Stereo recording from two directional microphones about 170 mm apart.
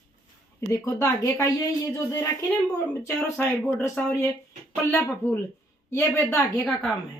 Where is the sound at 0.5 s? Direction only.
20° left (ahead or behind).